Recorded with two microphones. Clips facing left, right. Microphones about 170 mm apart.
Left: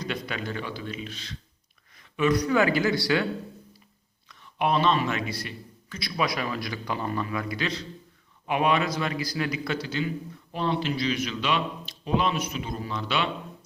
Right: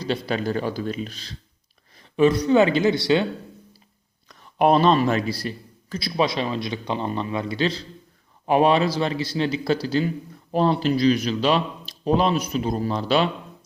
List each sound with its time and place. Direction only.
0.0 s a man's voice: 30° right (ahead or behind)
4.3 s a man's voice: 40° right (ahead or behind)